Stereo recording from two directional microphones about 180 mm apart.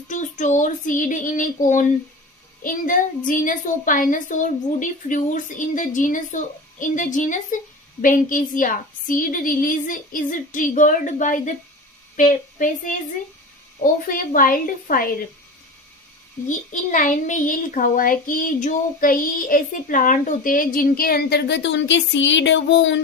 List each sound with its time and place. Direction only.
0.1 s a child's voice: 45° left (ahead or behind)
16.5 s a child's voice: 45° left (ahead or behind); by 23.0 s 90° left